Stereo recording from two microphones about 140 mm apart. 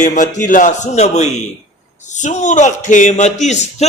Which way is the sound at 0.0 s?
65° left (ahead or behind).